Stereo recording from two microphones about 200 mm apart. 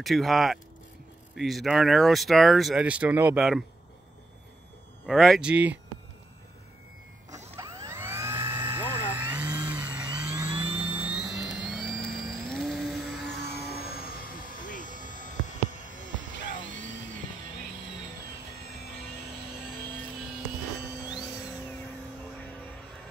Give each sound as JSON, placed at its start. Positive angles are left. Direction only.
{"t": 0.0, "sound": "speech", "side_deg": 0}
{"t": 5.0, "sound": "speech", "side_deg": 0}
{"t": 7.2, "sound": "mechanisms", "side_deg": -35}
{"t": 7.5, "sound": "a sound", "side_deg": -15}
{"t": 9.8, "sound": "vehicle", "side_deg": -5}
{"t": 13.3, "sound": "vehicle", "side_deg": 55}